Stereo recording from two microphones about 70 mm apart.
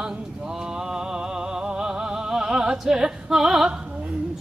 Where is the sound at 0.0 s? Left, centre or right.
Centre.